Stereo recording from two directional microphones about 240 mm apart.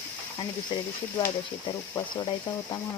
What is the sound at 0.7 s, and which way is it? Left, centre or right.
Speech, centre.